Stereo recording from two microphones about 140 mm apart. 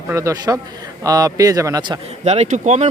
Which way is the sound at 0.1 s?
20° right (ahead or behind).